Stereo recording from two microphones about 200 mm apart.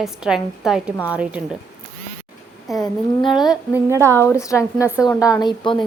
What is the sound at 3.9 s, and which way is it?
Speech, 15° right (ahead or behind).